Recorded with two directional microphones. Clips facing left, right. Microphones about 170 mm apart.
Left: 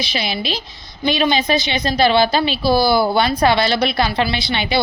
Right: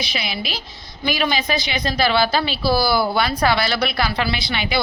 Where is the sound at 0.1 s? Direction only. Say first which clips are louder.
Left 4 dB; 30° left (ahead or behind).